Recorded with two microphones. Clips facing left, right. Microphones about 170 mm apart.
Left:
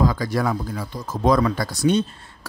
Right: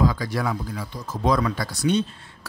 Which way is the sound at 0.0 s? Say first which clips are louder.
Left 2 dB; 45° left (ahead or behind).